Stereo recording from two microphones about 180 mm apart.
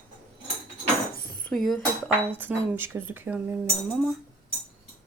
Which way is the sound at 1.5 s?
Centre (ahead or behind).